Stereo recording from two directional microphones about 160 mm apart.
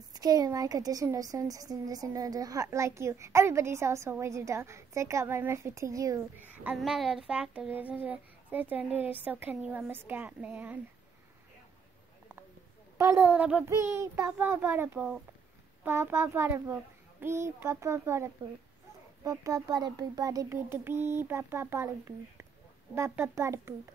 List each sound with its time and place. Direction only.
0.1 s speech: 25° right (ahead or behind)
6.5 s child singing: 10° right (ahead or behind)
6.8 s speech: centre (ahead or behind)
12.9 s speech: 15° right (ahead or behind)